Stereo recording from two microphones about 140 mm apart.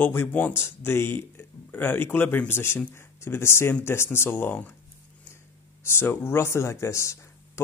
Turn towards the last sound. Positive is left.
turn(degrees=20)  # may be behind; listen again after turning